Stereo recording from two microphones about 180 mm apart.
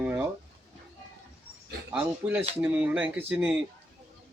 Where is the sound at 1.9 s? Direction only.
5° right (ahead or behind).